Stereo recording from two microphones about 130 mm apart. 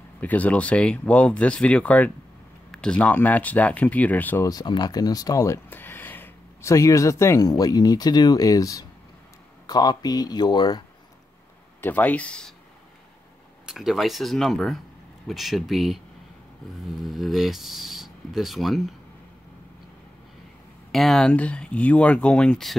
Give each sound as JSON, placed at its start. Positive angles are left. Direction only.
{"t": 0.2, "sound": "speech", "side_deg": 10}
{"t": 4.5, "sound": "speech", "side_deg": 30}
{"t": 11.8, "sound": "speech", "side_deg": 10}
{"t": 13.7, "sound": "speech", "side_deg": 0}
{"t": 17.0, "sound": "speech", "side_deg": 0}
{"t": 20.9, "sound": "speech", "side_deg": 0}